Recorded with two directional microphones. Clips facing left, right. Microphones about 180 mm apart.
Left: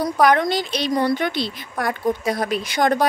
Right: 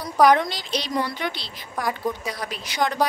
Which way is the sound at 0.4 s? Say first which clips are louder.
Left 6 dB; 55° left (ahead or behind).